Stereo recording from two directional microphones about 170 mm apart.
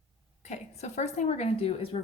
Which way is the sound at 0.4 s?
40° left (ahead or behind).